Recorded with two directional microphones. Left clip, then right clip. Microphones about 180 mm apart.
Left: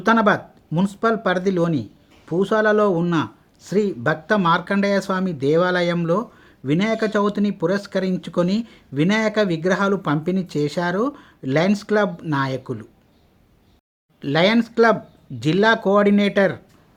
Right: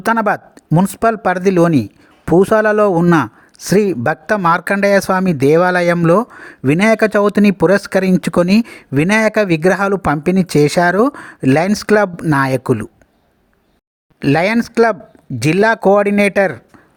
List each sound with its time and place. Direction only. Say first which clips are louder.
0.0 s speech: right 2 dB; 55° right (ahead or behind)
14.2 s speech: right 4 dB; 50° right (ahead or behind)